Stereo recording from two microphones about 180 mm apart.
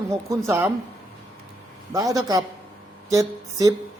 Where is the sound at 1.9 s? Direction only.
20° right (ahead or behind).